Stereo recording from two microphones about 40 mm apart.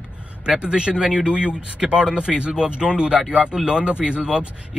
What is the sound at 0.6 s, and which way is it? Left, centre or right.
Speech, right.